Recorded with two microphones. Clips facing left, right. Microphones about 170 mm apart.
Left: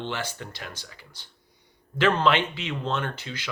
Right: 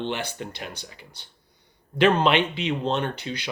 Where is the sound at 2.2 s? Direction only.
20° right (ahead or behind).